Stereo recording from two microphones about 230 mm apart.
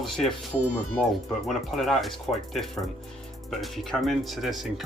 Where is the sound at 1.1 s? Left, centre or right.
Centre.